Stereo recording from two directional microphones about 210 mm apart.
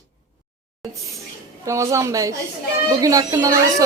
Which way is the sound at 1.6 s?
15° right (ahead or behind).